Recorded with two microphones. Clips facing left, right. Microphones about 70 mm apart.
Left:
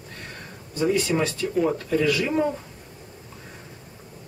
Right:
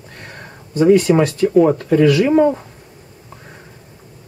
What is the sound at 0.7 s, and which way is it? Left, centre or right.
Speech, right.